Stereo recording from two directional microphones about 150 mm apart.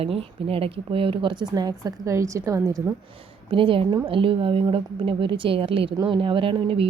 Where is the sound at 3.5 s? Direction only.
35° right (ahead or behind).